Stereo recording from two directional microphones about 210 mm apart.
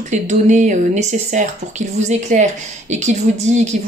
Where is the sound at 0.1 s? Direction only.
35° right (ahead or behind).